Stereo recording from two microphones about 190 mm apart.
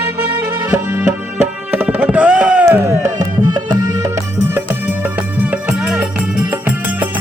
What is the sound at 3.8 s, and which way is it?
Music, 15° right (ahead or behind).